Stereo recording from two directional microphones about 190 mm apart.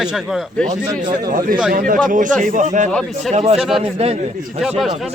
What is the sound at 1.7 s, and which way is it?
A man's voice, 45° right (ahead or behind).